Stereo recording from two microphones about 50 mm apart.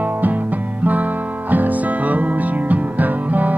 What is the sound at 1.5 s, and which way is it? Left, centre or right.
Music, right.